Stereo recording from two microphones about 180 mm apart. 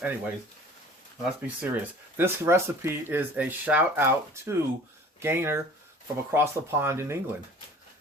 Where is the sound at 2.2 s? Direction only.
15° right (ahead or behind).